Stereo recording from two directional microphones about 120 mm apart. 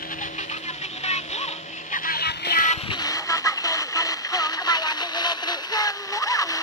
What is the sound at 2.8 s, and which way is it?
Music, 30° left (ahead or behind).